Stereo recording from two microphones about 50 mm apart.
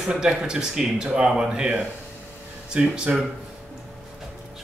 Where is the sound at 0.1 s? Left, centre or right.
Right.